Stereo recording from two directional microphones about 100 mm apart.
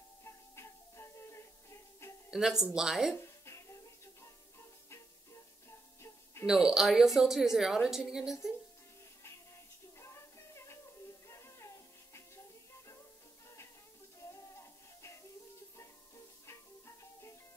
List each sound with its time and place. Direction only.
0.2 s music: 25° left (ahead or behind)
2.3 s speech: 5° right (ahead or behind)
3.2 s music: 30° left (ahead or behind)
6.4 s speech: 5° right (ahead or behind)
9.9 s music: 30° left (ahead or behind)
14.2 s music: 30° left (ahead or behind)
16.4 s music: 25° left (ahead or behind)